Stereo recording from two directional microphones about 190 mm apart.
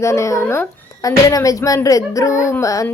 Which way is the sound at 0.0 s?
15° left (ahead or behind).